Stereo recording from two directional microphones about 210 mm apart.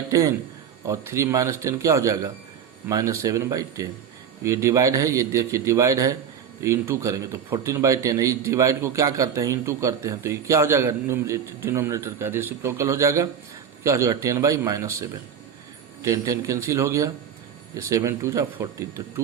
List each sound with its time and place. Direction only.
0.1 s a man's voice: 15° right (ahead or behind)
16.0 s a man's voice: 15° right (ahead or behind)